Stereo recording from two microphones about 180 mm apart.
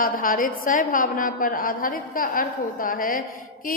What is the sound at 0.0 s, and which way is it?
A woman's voice, 50° left (ahead or behind).